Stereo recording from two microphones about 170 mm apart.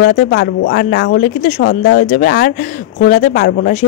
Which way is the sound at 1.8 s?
60° left (ahead or behind).